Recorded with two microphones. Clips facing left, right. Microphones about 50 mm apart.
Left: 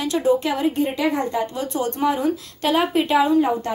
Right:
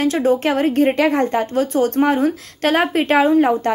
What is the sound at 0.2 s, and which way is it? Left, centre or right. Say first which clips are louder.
A woman's voice: right 3 dB; right.